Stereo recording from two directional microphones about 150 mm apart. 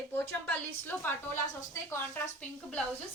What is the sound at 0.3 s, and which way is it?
A woman's voice, 15° left (ahead or behind).